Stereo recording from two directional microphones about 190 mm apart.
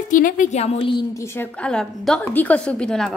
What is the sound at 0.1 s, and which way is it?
A woman's voice, 45° left (ahead or behind).